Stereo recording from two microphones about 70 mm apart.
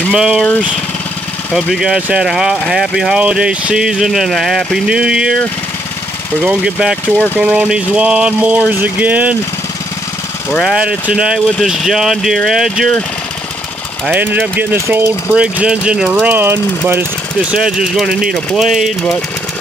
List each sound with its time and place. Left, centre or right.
0.1 s speech: centre
1.5 s speech: centre
6.4 s speech: centre
10.8 s speech: centre
14.1 s speech: right
15.3 s speech: centre; by 17.0 s right
17.6 s speech: centre